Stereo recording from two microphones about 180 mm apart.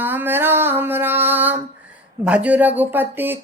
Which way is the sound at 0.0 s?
10° right (ahead or behind).